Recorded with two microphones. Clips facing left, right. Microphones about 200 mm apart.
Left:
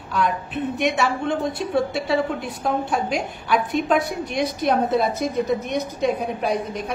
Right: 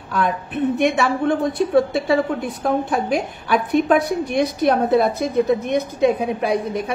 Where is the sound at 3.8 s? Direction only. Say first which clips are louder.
Right 4 dB; 55° right (ahead or behind).